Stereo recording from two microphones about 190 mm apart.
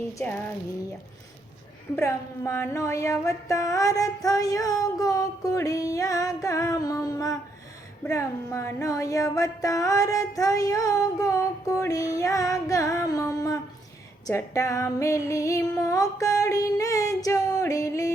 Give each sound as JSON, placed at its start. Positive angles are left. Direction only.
{"t": 0.1, "sound": "female singing", "side_deg": 15}
{"t": 2.0, "sound": "female singing", "side_deg": 15}